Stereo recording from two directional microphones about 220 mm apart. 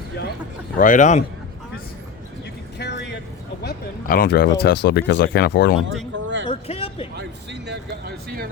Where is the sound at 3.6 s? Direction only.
45° left (ahead or behind).